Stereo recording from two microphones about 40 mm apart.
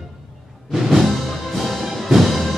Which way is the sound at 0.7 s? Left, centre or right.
Centre.